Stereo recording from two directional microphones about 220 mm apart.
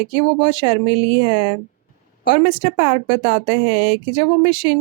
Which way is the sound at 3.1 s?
25° right (ahead or behind).